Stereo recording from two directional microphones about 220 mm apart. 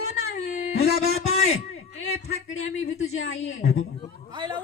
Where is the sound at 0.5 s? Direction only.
45° left (ahead or behind).